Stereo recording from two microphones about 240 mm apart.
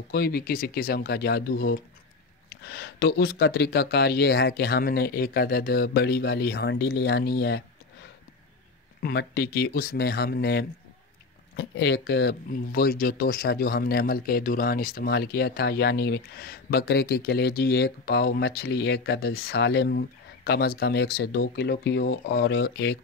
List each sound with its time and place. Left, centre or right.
0.1 s speech: left
9.0 s speech: left